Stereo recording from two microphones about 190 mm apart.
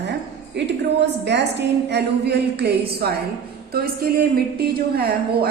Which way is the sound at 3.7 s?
50° right (ahead or behind).